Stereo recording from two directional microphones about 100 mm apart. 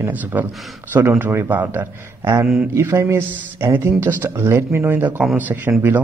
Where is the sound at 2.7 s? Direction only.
25° right (ahead or behind).